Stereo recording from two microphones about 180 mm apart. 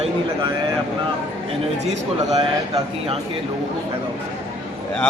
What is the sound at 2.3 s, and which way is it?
Speech, 35° right (ahead or behind).